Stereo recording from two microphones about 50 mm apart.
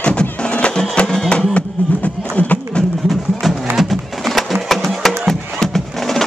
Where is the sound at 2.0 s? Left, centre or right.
Left.